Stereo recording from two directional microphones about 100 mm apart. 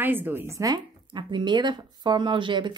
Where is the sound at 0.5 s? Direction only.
40° right (ahead or behind).